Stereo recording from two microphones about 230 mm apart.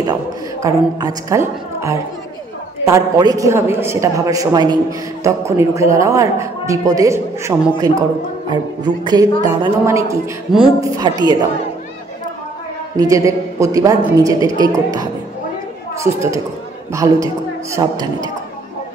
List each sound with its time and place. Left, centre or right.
0.0 s a woman's voice: centre
12.9 s speech: centre
16.0 s speech: centre